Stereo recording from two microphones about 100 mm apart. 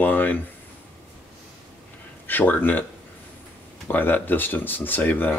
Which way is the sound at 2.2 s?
20° left (ahead or behind).